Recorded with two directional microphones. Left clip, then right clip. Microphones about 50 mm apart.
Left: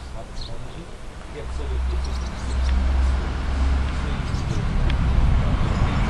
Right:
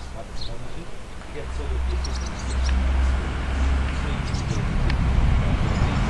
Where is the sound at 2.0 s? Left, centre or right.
Centre.